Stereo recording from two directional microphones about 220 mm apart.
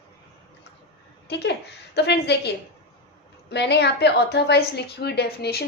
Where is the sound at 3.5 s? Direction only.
50° left (ahead or behind).